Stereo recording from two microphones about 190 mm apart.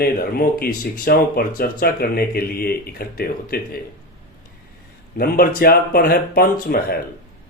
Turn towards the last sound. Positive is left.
turn(degrees=50)  # may be behind; listen again after turning